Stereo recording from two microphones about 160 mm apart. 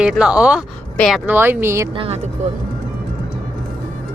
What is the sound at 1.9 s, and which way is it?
Speech, 35° right (ahead or behind).